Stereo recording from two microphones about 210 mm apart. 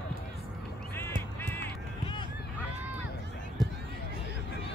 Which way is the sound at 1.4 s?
10° left (ahead or behind).